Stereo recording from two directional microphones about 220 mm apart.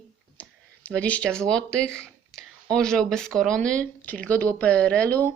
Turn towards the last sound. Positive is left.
turn(degrees=10)  # may be behind; listen again after turning